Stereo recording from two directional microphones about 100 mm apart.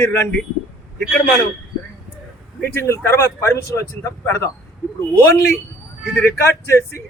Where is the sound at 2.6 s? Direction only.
25° left (ahead or behind).